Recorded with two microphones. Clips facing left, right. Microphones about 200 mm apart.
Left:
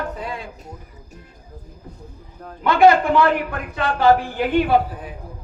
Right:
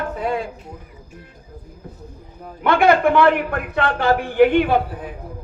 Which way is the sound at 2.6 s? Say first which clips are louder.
Left 1 dB; 55° right (ahead or behind).